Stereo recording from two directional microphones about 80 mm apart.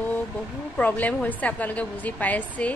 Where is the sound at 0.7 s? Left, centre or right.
Left.